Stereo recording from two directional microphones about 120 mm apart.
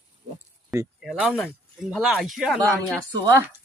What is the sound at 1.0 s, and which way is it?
Speech, 5° right (ahead or behind).